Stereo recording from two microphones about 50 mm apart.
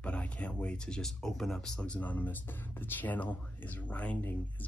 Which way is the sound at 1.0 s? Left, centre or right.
Centre.